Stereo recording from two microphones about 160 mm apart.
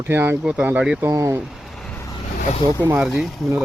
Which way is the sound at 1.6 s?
5° left (ahead or behind).